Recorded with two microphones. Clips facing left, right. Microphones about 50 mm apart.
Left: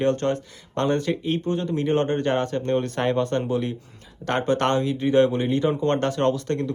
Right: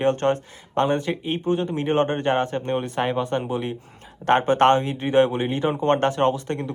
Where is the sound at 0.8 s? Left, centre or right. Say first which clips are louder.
Left 2 dB; centre.